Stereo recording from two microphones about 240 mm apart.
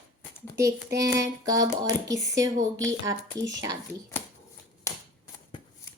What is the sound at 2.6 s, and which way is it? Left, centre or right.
Speech, right.